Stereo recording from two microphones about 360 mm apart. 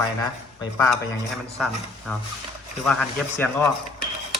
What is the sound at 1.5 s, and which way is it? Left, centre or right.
Speech, centre.